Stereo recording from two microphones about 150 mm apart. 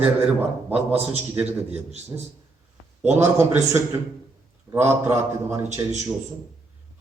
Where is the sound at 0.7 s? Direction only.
40° right (ahead or behind).